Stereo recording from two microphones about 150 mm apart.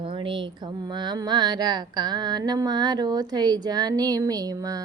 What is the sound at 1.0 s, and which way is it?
Carnatic music, 30° right (ahead or behind).